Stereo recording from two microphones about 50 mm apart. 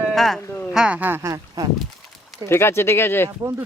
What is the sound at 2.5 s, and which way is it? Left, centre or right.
Speech, left.